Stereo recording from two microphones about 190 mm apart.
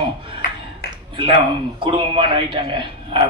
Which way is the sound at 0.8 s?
65° left (ahead or behind).